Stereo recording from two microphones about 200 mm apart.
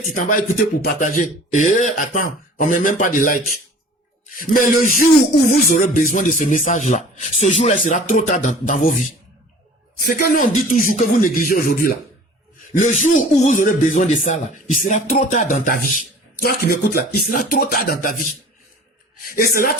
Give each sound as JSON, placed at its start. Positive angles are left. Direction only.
{"t": 0.1, "sound": "speech", "side_deg": 45}
{"t": 10.1, "sound": "speech", "side_deg": 45}
{"t": 13.0, "sound": "speech", "side_deg": 35}